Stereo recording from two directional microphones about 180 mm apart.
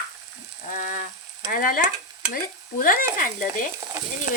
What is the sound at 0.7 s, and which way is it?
Stir, 45° left (ahead or behind).